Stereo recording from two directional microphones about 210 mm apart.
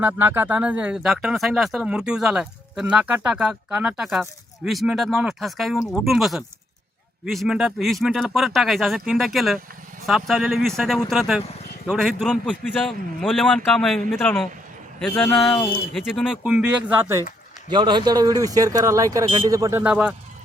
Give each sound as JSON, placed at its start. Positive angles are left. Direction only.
{"t": 0.0, "sound": "speech", "side_deg": -10}
{"t": 17.7, "sound": "speech", "side_deg": -20}